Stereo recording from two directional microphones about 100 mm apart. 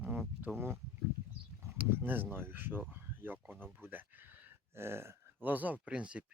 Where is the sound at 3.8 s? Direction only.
20° right (ahead or behind).